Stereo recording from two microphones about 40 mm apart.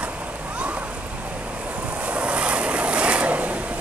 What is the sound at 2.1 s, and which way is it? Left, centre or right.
Vehicle, right.